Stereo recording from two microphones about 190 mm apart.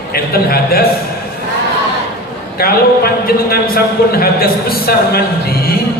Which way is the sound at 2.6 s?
50° left (ahead or behind).